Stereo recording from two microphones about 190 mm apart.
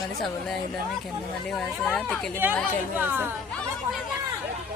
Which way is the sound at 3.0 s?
10° right (ahead or behind).